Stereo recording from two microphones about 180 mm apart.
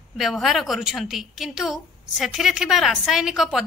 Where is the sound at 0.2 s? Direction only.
Centre (ahead or behind).